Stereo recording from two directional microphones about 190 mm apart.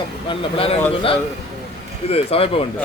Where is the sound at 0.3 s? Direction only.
30° left (ahead or behind).